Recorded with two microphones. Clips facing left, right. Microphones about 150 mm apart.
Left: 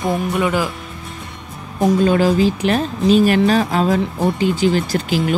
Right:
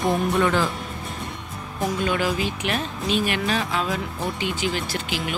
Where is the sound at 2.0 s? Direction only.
35° left (ahead or behind).